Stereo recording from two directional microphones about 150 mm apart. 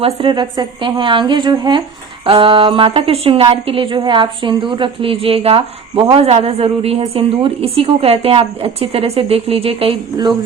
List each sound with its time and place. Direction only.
0.0 s a woman's voice: 35° right (ahead or behind)